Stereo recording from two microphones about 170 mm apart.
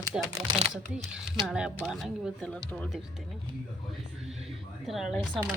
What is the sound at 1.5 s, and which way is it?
Speech, 5° right (ahead or behind).